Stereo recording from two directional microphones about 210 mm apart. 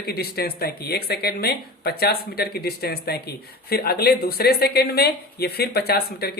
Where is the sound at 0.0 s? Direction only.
50° left (ahead or behind).